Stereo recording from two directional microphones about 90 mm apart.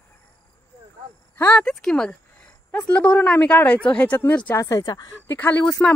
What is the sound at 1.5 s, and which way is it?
Speech, 10° left (ahead or behind).